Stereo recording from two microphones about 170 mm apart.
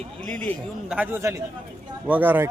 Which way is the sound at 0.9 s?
10° right (ahead or behind).